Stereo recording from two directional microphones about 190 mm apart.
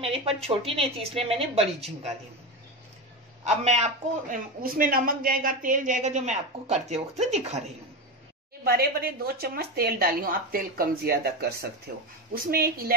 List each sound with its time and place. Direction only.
0.0 s a woman's voice: 30° right (ahead or behind)
3.4 s a man's voice: 35° right (ahead or behind)
8.6 s speech: 55° right (ahead or behind)